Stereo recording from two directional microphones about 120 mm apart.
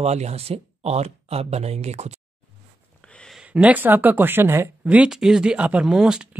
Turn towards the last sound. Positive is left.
turn(degrees=-5)  # may be behind; listen again after turning